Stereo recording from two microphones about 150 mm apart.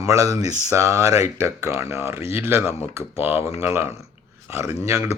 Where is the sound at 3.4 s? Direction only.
40° left (ahead or behind).